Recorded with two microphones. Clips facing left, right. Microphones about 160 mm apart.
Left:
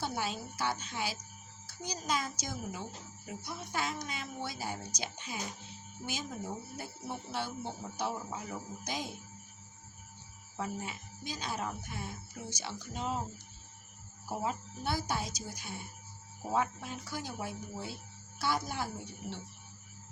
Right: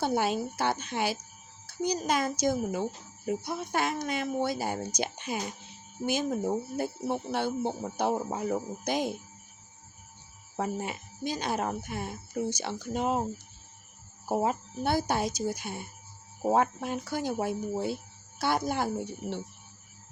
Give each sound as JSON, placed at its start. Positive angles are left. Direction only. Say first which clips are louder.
{"t": 0.0, "sound": "speech", "louder": "right 9 dB", "side_deg": -60}
{"t": 10.6, "sound": "speech", "louder": "right 7 dB", "side_deg": -60}
{"t": 14.3, "sound": "speech", "louder": "right 8 dB", "side_deg": -60}